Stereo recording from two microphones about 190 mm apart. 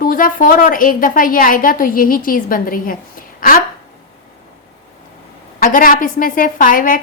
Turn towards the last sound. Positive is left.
turn(degrees=45)  # may be behind; listen again after turning